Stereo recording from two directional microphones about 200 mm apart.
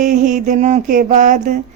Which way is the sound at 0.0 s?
40° right (ahead or behind).